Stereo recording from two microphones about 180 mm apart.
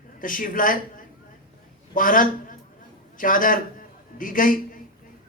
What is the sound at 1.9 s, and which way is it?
A man's voice, 50° left (ahead or behind).